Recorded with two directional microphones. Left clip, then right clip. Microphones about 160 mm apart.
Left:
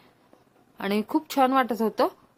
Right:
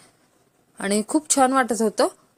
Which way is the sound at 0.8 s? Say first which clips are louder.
Right 3 dB; 30° right (ahead or behind).